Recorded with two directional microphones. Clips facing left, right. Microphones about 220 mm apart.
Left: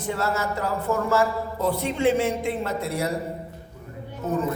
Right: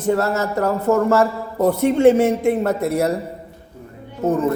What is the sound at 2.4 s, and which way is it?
Speech, 45° right (ahead or behind).